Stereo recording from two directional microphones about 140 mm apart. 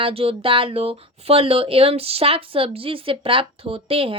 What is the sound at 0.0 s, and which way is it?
Speech, 40° right (ahead or behind).